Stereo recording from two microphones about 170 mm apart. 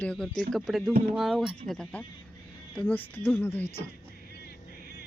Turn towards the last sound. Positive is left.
turn(degrees=10)  # may be behind; listen again after turning